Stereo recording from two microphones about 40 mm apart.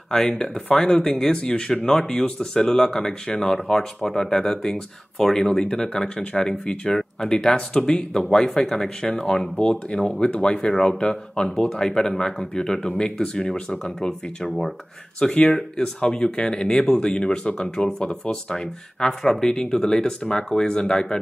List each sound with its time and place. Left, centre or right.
0.1 s speech: centre
9.1 s speech: left
10.6 s speech: centre
11.0 s speech: left